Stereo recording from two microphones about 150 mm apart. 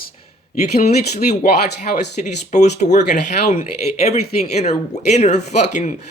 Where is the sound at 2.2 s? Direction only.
55° left (ahead or behind).